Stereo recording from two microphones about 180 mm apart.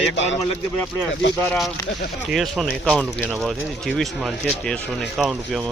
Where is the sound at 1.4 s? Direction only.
5° left (ahead or behind).